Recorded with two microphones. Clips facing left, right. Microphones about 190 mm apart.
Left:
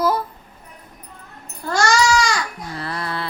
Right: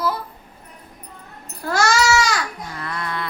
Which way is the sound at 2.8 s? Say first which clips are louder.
Left 1 dB; 30° left (ahead or behind).